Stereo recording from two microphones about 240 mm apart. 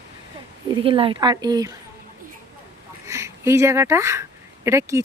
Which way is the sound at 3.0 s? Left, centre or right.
Centre.